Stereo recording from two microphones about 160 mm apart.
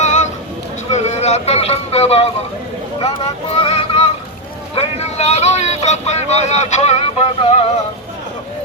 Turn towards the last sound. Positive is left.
turn(degrees=40)  # may be behind; listen again after turning